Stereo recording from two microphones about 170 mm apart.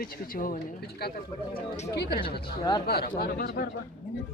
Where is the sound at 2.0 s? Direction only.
70° left (ahead or behind).